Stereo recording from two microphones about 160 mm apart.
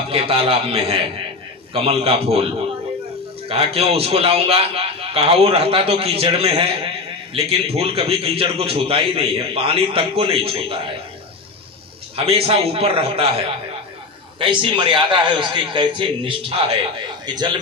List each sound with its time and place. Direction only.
0.1 s a man's voice: 35° right (ahead or behind)
12.1 s a man's voice: 35° right (ahead or behind)